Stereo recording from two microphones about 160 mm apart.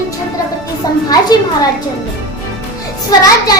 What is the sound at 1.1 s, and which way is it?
Speech, 25° left (ahead or behind).